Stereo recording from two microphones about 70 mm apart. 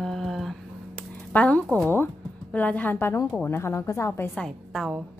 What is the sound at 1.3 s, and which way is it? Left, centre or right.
Speech, centre.